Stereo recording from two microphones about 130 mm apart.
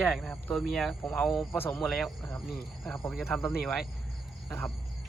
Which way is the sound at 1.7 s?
Centre (ahead or behind).